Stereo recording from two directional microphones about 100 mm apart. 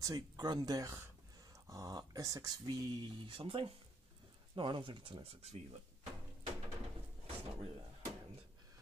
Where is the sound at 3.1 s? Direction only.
65° right (ahead or behind); by 5.6 s 80° right.